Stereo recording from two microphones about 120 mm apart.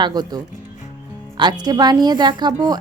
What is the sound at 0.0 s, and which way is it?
Speech, 35° right (ahead or behind).